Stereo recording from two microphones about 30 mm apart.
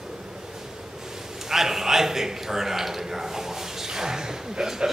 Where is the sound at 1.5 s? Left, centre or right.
Centre.